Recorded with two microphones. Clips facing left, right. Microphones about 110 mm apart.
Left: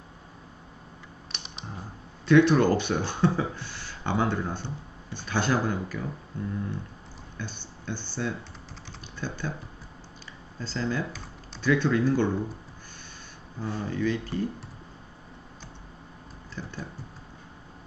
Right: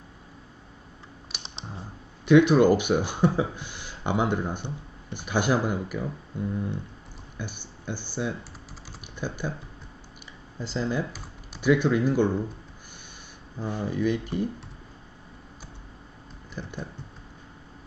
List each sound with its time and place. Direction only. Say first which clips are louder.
1.3 s computer keyboard: right 1 dB; 5° right (ahead or behind)
2.2 s speech: right 2 dB; 15° right (ahead or behind)
10.6 s speech: right 2 dB; 15° right (ahead or behind)
13.6 s speech: right 2 dB; 15° right (ahead or behind)
16.6 s a sound: right 1 dB; 15° right (ahead or behind)